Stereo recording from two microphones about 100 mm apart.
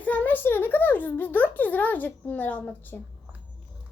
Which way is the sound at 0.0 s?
15° left (ahead or behind).